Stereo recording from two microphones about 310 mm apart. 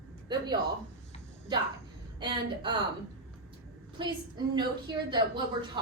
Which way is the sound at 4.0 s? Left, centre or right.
Centre.